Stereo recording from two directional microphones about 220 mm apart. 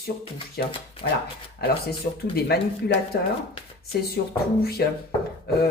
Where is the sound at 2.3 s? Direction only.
45° left (ahead or behind).